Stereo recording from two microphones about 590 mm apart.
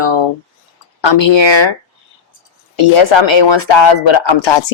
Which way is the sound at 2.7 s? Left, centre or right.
Left.